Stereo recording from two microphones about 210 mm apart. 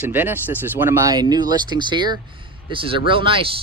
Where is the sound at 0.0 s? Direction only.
10° right (ahead or behind).